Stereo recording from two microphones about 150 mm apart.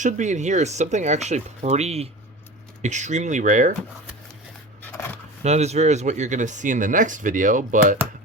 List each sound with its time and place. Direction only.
0.0 s speech: 55° right (ahead or behind)
4.8 s dog: 15° left (ahead or behind)
5.4 s speech: 45° right (ahead or behind)